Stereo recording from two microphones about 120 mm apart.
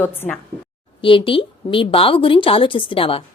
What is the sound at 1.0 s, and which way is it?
A woman's voice, 45° left (ahead or behind).